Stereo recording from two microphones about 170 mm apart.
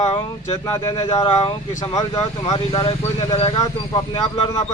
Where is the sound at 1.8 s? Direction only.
20° left (ahead or behind).